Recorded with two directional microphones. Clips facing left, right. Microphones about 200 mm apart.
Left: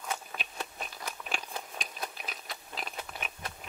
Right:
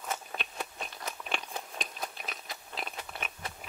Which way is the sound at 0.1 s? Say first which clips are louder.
Right 1 dB; centre (ahead or behind).